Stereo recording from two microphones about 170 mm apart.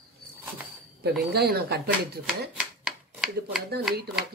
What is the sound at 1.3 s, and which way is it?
Speech, 70° right (ahead or behind).